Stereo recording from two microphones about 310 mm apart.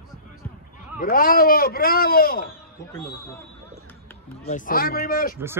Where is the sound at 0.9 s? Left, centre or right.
Left.